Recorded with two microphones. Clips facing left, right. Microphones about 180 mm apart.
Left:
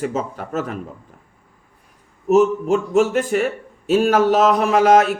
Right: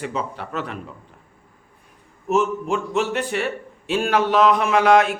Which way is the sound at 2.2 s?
40° left (ahead or behind).